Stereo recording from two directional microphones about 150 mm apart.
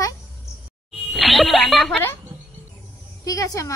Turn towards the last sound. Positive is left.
turn(degrees=20)  # may be behind; listen again after turning